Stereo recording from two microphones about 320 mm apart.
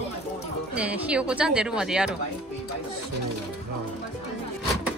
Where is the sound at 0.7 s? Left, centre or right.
Centre.